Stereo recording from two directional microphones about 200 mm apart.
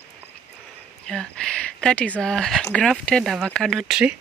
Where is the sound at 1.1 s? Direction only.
5° left (ahead or behind).